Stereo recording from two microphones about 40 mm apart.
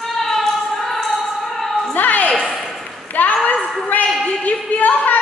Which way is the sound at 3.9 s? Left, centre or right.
Left.